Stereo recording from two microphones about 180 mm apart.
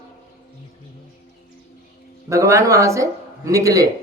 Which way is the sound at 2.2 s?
15° right (ahead or behind).